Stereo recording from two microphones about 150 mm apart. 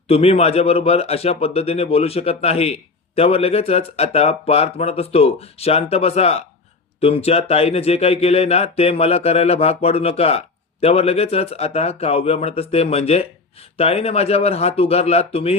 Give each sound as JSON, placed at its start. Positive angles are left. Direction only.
{"t": 0.1, "sound": "a man's voice", "side_deg": 45}